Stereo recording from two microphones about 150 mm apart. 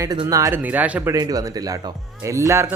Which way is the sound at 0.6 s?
10° right (ahead or behind).